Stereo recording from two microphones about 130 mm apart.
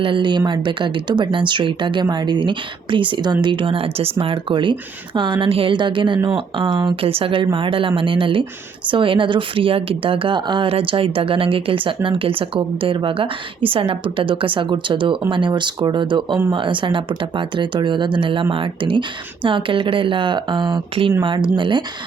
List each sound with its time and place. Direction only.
0.0 s speech: 40° right (ahead or behind)